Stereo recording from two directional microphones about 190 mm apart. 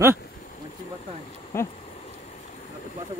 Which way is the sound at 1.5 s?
15° left (ahead or behind).